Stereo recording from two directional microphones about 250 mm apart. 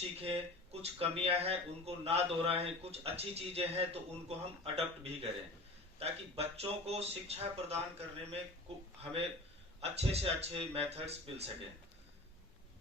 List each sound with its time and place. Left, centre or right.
0.2 s speech: right
9.8 s speech: right